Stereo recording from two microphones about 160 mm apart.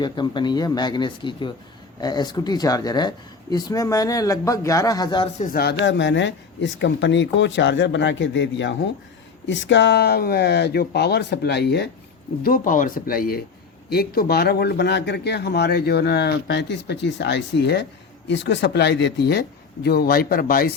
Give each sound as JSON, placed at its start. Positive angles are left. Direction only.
{"t": 0.0, "sound": "speech", "side_deg": 30}
{"t": 5.4, "sound": "speech", "side_deg": 65}
{"t": 9.6, "sound": "speech", "side_deg": 90}
{"t": 12.4, "sound": "speech", "side_deg": 60}